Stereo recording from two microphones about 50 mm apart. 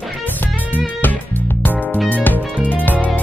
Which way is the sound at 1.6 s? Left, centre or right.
Left.